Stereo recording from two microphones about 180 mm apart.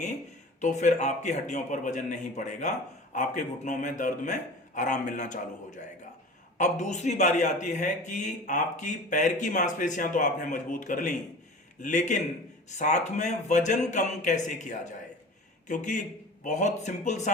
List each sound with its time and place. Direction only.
0.6 s a man's voice: 40° left (ahead or behind)